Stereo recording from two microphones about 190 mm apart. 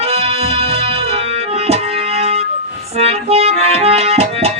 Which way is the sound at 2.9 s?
30° right (ahead or behind).